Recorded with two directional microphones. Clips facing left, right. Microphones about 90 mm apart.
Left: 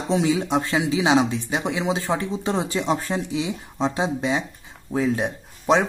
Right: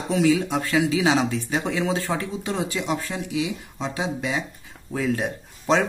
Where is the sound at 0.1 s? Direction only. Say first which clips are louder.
Even; 25° left (ahead or behind).